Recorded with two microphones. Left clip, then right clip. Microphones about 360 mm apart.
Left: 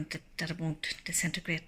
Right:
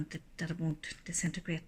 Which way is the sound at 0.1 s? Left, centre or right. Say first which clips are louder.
Left 5 dB; centre.